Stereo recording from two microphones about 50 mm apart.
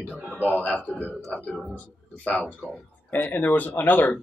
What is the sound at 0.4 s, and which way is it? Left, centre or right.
Speech, left.